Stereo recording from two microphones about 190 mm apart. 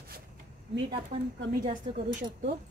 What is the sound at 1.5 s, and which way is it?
Speech, 45° right (ahead or behind).